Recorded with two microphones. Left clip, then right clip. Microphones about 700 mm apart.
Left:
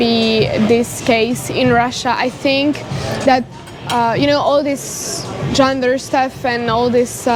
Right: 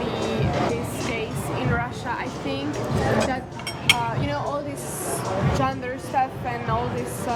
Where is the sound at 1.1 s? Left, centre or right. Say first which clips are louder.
Left 17 dB; left.